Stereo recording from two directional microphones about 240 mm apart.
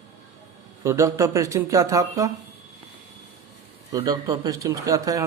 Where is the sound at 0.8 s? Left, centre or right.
Centre.